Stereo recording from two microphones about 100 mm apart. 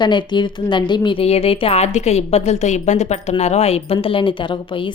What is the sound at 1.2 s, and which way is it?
A woman's voice, 80° left.